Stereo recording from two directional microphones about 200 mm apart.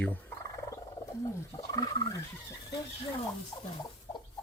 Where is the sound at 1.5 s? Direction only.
20° left (ahead or behind).